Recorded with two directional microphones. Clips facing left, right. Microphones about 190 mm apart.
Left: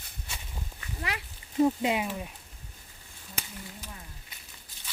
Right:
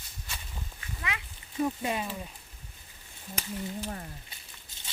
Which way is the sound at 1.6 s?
20° left (ahead or behind).